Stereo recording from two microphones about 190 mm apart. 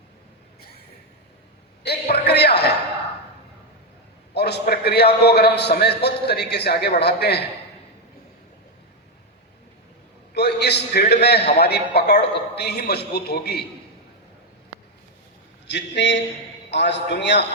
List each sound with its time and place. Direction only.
1.8 s a sound: 60° left (ahead or behind)
4.4 s a man's voice: 60° left (ahead or behind)
10.3 s a man's voice: 60° left (ahead or behind)
15.6 s a man's voice: 65° left (ahead or behind)